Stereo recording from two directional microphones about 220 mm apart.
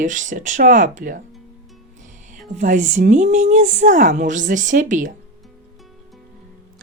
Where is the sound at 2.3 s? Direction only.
35° right (ahead or behind).